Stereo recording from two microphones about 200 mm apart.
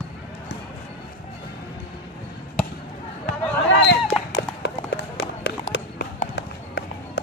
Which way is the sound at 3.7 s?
60° left (ahead or behind).